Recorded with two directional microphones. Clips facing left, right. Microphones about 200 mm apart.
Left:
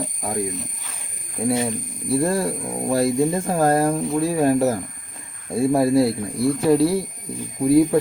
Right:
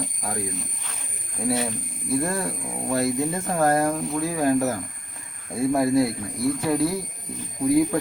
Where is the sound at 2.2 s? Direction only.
30° left (ahead or behind).